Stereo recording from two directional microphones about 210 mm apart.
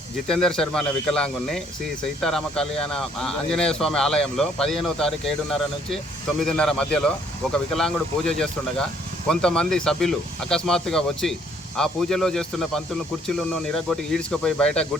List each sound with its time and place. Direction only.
0.3 s a man's voice: 5° left (ahead or behind)